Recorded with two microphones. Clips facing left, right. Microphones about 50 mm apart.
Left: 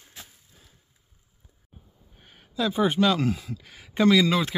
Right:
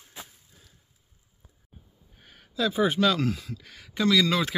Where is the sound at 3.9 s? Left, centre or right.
Left.